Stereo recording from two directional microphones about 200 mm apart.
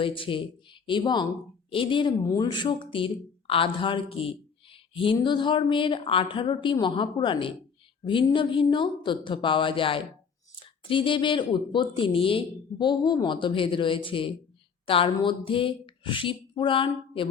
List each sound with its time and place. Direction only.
0.0 s speech: 25° left (ahead or behind)